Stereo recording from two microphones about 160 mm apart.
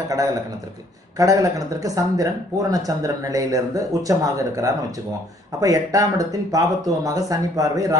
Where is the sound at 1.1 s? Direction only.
20° right (ahead or behind).